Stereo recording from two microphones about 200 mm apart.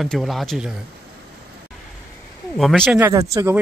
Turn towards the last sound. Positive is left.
turn(degrees=-15)  # may be behind; listen again after turning